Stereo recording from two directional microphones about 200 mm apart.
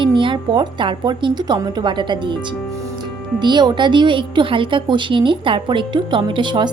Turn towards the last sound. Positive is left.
turn(degrees=-25)  # may be behind; listen again after turning